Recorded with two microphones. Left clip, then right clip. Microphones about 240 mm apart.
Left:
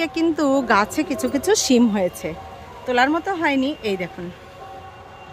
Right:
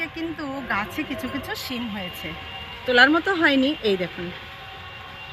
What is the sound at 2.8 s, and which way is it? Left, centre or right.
Speech, centre.